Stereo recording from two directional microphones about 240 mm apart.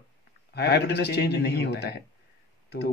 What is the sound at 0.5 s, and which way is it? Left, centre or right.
A man's voice, left.